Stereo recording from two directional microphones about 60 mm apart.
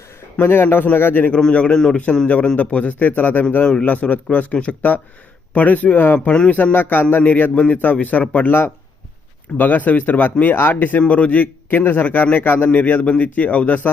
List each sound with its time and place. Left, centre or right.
0.4 s speech: left
1.3 s a man's voice: centre
9.6 s a man's voice: left
10.8 s a man's voice: left